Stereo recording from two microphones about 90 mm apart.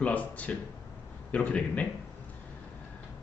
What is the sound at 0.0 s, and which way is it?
Speech, 15° left (ahead or behind).